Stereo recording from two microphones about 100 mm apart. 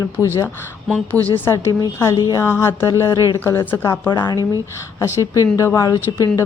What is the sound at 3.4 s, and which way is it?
Speech, 20° left (ahead or behind).